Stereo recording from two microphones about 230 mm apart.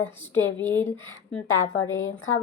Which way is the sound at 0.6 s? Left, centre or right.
Centre.